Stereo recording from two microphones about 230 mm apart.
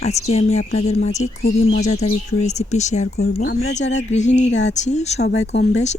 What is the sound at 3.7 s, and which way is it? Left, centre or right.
Speech, left.